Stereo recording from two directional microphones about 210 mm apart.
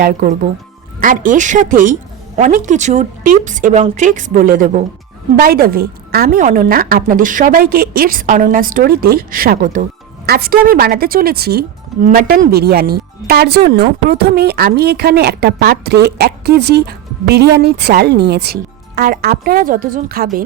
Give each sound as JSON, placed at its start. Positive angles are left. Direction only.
{"t": 0.0, "sound": "a woman's voice", "side_deg": -35}